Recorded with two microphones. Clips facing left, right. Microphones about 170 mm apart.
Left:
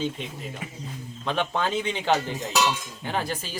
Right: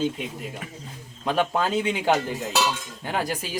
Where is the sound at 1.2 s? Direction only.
5° right (ahead or behind).